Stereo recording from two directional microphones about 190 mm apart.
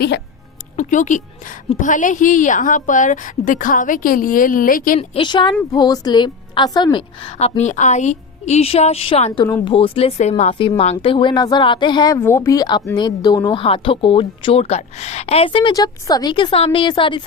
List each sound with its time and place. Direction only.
0.8 s a woman's voice: 40° left (ahead or behind)
4.9 s a woman's voice: 25° left (ahead or behind)